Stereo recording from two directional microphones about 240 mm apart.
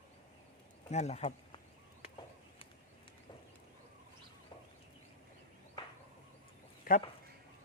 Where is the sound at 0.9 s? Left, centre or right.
Left.